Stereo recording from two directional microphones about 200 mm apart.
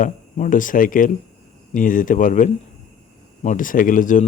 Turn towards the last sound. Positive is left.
turn(degrees=40)  # may be behind; listen again after turning